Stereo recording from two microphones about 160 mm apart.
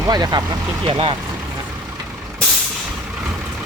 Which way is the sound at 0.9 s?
35° right (ahead or behind).